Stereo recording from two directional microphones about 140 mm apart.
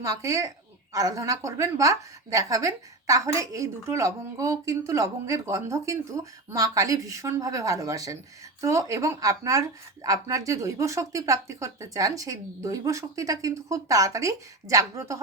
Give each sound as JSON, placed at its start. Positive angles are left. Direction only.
{"t": 0.0, "sound": "a woman's voice", "side_deg": -20}